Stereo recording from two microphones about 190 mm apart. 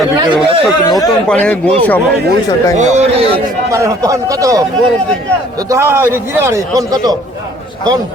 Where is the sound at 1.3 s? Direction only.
5° left (ahead or behind).